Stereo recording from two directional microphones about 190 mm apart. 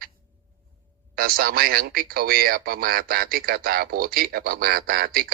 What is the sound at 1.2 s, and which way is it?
Speech, 50° right (ahead or behind).